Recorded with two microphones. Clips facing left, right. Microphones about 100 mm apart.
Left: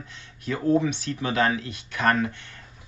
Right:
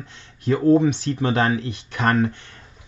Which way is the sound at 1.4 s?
25° right (ahead or behind).